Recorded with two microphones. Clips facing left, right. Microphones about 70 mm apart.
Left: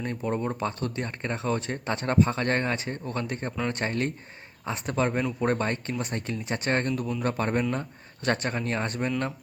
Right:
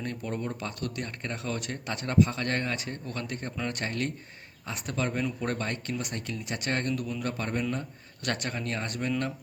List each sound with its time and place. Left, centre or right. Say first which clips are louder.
0.0 s speech: left 5 dB; left